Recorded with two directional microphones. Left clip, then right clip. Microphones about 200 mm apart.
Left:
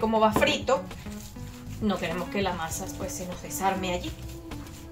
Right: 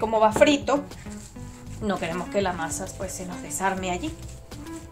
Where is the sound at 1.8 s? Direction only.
55° right (ahead or behind).